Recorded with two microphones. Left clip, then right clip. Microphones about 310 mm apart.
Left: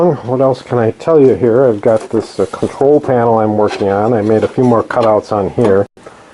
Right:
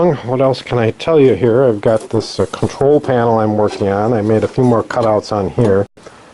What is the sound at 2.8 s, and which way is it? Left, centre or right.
Speech, left.